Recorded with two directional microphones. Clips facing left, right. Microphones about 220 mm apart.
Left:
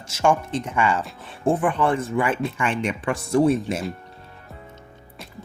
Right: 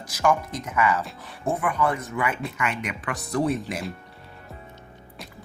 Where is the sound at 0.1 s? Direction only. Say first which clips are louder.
Left 3 dB; 30° left (ahead or behind).